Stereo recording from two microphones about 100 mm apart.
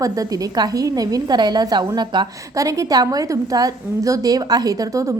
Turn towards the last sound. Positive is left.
turn(degrees=-40)  # may be behind; listen again after turning